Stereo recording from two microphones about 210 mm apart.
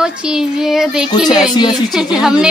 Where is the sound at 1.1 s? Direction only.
20° left (ahead or behind).